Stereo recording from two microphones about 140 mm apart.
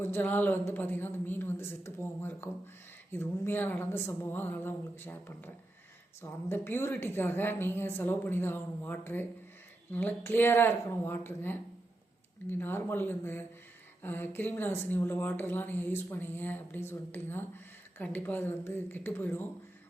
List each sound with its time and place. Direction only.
0.0 s speech: 15° left (ahead or behind)
6.5 s speech: 15° left (ahead or behind)